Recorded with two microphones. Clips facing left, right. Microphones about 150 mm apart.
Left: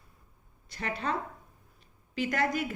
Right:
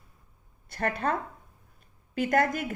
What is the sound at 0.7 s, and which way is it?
Speech, 50° right (ahead or behind).